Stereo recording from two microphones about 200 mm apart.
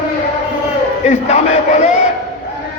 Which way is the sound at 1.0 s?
35° left (ahead or behind).